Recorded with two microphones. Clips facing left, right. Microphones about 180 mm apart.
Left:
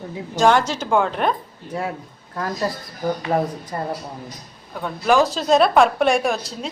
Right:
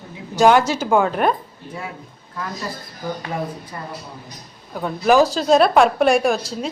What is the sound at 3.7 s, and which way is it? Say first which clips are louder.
Speech: left 6 dB; 40° left (ahead or behind).